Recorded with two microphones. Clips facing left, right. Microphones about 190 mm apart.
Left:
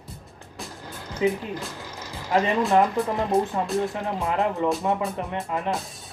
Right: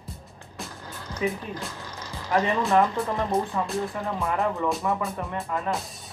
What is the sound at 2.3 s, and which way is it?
Speech, 20° left (ahead or behind).